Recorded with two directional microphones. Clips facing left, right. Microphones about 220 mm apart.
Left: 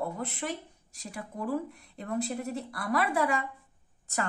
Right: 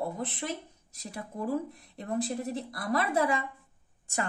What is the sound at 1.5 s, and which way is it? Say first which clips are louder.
A woman's voice: even; 25° right (ahead or behind).